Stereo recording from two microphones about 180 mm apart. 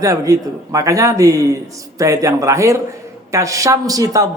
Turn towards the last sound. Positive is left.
turn(degrees=-20)  # may be behind; listen again after turning